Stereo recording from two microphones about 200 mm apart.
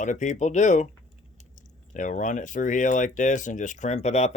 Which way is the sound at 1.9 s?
40° left (ahead or behind).